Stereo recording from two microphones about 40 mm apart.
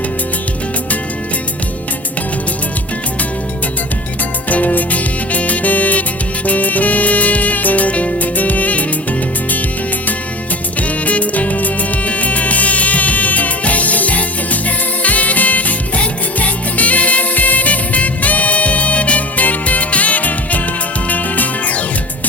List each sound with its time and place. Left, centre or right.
4.4 s music: left
10.8 s music: left